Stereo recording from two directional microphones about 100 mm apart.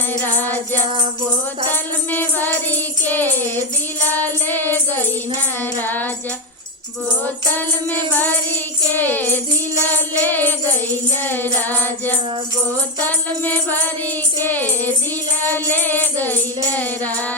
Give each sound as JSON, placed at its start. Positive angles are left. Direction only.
{"t": 0.3, "sound": "music", "side_deg": 20}
{"t": 7.5, "sound": "music", "side_deg": 20}